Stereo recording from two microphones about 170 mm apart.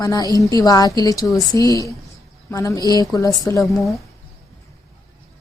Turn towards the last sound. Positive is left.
turn(degrees=0)  # may be behind; listen again after turning